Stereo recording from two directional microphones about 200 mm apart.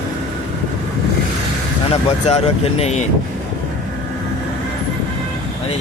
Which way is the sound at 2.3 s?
30° left (ahead or behind).